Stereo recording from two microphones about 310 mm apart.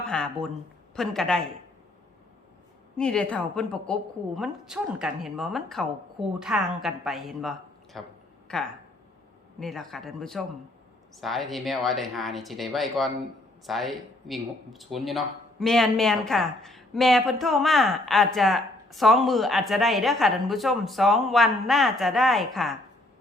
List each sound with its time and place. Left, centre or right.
0.1 s speech: centre
3.0 s speech: centre
9.6 s speech: centre